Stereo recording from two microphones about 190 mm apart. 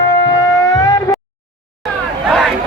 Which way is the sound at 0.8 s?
20° left (ahead or behind).